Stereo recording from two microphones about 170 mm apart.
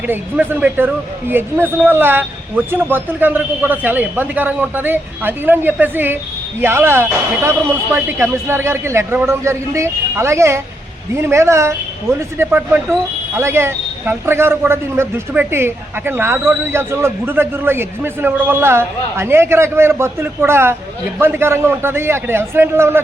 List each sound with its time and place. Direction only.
0.1 s a man's voice: 10° right (ahead or behind)